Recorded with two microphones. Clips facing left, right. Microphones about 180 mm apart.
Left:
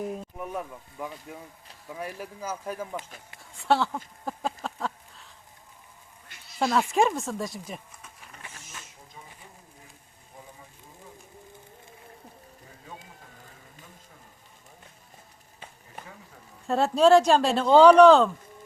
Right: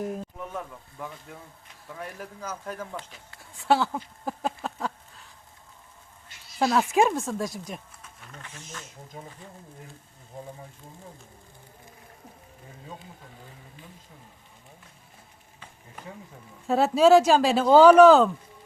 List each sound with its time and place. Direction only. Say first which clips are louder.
0.0 s speech: right 1 dB; centre (ahead or behind)
0.3 s speech: left 2 dB; 10° left (ahead or behind)
4.3 s a sound: right 1 dB; centre (ahead or behind)
6.6 s speech: right 1 dB; centre (ahead or behind)
9.1 s speech: right 7 dB; 55° right (ahead or behind)
16.6 s speech: right 1 dB; centre (ahead or behind)